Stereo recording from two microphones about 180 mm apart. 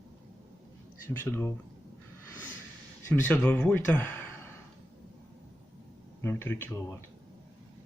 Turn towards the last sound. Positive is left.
turn(degrees=15)  # may be behind; listen again after turning